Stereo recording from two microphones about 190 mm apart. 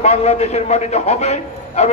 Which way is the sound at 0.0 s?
35° left (ahead or behind).